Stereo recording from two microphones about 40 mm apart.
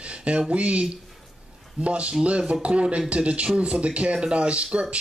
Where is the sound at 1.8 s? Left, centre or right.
Right.